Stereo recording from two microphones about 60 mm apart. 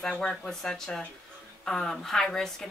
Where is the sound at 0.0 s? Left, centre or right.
Centre.